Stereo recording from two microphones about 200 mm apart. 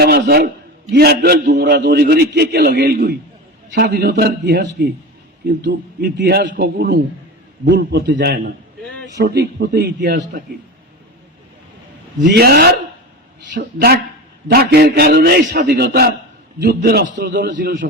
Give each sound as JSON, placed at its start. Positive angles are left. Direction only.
{"t": 0.0, "sound": "a man's voice", "side_deg": -50}
{"t": 12.2, "sound": "a man's voice", "side_deg": -50}